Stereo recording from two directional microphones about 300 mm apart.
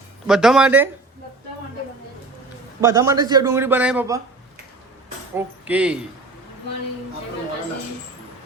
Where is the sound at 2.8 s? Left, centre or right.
Centre.